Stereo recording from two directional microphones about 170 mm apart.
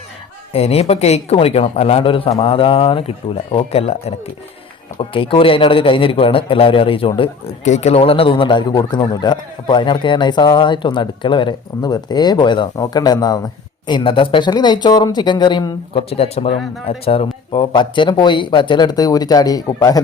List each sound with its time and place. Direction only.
0.5 s a man's voice: 35° left (ahead or behind)
4.9 s speech: 30° left (ahead or behind)